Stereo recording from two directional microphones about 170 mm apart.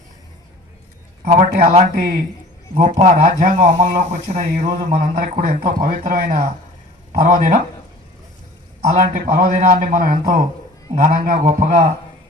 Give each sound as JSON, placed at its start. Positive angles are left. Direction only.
{"t": 1.2, "sound": "speech", "side_deg": -50}
{"t": 9.1, "sound": "a man's voice", "side_deg": -55}